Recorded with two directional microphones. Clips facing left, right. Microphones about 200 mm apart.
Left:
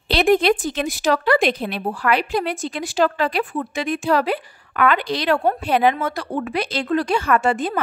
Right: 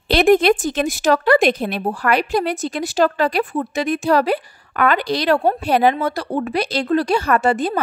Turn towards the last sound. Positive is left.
turn(degrees=-35)  # may be behind; listen again after turning